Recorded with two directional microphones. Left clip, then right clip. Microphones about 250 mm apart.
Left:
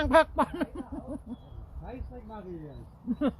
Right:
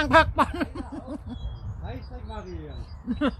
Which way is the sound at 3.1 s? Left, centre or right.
Centre.